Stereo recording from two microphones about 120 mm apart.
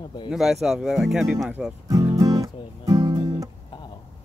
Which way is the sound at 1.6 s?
10° right (ahead or behind).